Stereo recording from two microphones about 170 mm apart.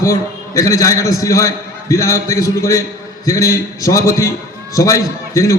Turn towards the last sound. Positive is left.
turn(degrees=20)  # may be behind; listen again after turning